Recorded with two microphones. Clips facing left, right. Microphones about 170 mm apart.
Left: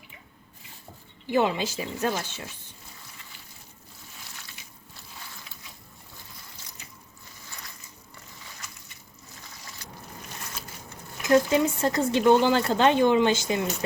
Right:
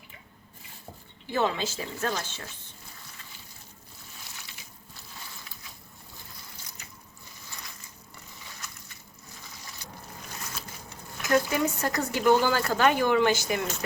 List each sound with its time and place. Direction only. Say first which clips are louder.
1.3 s a woman's voice: left 3 dB; 15° left (ahead or behind)
11.2 s speech: left 4 dB; 25° left (ahead or behind)